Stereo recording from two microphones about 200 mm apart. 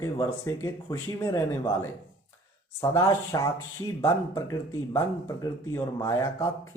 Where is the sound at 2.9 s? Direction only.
15° left (ahead or behind).